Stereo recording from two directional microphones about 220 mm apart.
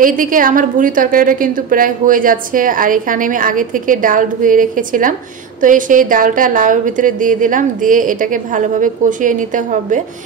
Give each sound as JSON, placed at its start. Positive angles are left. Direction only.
{"t": 0.0, "sound": "a woman's voice", "side_deg": -40}